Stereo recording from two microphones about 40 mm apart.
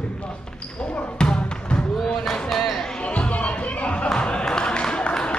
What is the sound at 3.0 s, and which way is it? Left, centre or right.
Music, left.